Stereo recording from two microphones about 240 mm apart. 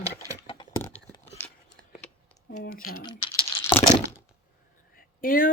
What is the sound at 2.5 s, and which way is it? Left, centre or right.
Speech, left.